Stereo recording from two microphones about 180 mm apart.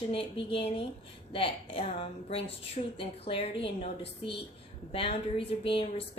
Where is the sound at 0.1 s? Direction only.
30° left (ahead or behind).